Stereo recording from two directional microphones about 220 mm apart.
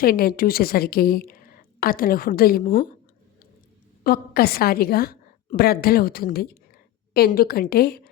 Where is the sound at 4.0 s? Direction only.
45° left (ahead or behind).